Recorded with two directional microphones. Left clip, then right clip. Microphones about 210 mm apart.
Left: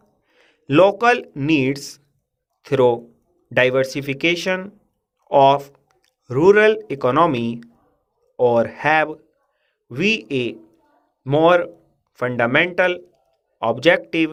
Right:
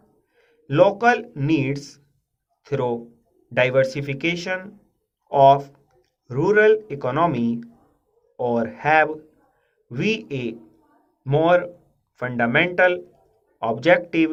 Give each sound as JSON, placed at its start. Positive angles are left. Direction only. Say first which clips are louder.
{"t": 0.3, "sound": "speech", "louder": "left 3 dB", "side_deg": 40}